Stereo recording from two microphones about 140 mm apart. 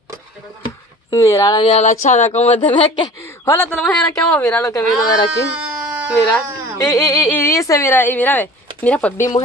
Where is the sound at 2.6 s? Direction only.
35° left (ahead or behind).